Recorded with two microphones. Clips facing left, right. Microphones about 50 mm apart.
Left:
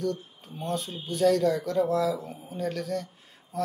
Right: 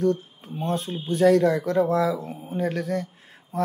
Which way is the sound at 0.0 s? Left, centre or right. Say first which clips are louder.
Right 7 dB; right.